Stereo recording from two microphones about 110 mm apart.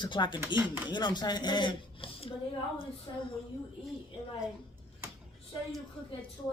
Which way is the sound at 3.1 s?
40° left (ahead or behind).